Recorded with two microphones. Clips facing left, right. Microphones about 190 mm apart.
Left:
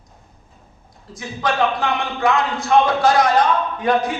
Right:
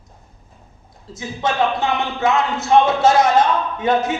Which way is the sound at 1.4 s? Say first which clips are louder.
Right 1 dB; 25° right (ahead or behind).